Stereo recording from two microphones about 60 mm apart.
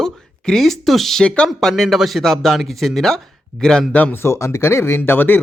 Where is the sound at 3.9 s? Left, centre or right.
Left.